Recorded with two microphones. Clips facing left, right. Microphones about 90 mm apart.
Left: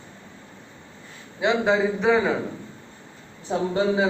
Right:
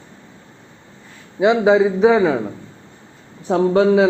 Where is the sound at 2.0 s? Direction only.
10° right (ahead or behind).